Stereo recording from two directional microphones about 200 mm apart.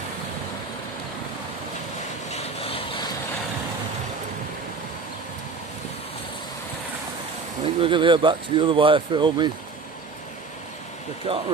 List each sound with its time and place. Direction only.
2.3 s vehicle: 30° left (ahead or behind)
7.6 s speech: 25° right (ahead or behind)
11.3 s speech: 25° right (ahead or behind)